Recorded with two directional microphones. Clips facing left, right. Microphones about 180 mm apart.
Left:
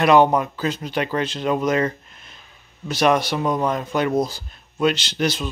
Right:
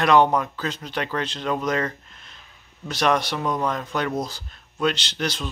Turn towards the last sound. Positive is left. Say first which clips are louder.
# left 5 dB
turn(degrees=10)  # may be behind; listen again after turning